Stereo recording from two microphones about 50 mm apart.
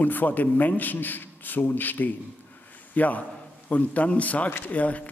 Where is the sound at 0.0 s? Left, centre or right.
Left.